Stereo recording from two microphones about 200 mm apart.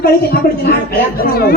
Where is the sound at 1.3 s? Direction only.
50° left (ahead or behind).